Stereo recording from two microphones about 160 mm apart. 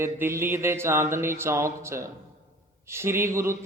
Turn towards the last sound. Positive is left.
turn(degrees=-15)  # may be behind; listen again after turning